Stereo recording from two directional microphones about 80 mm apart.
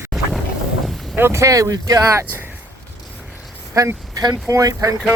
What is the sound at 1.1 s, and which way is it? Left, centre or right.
Speech, right.